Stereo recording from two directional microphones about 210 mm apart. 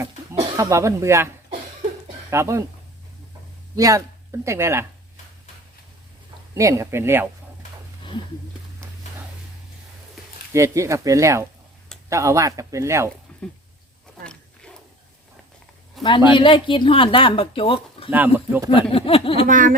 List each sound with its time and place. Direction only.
0.5 s speech: 15° right (ahead or behind)
2.3 s speech: 15° right (ahead or behind)
3.8 s speech: 15° right (ahead or behind)
6.5 s speech: 15° right (ahead or behind)
10.5 s speech: 15° right (ahead or behind)
14.3 s a sound: 5° left (ahead or behind)
16.0 s speech: 25° left (ahead or behind)
18.1 s speech: 10° right (ahead or behind)
18.7 s speech: 25° left (ahead or behind)
19.5 s speech: 40° right (ahead or behind)